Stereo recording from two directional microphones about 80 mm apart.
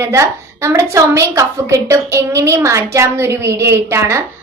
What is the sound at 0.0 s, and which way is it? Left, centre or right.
A woman's voice, right.